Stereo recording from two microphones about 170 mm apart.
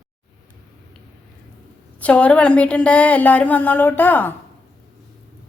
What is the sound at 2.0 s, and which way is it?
A woman's voice, 10° left (ahead or behind).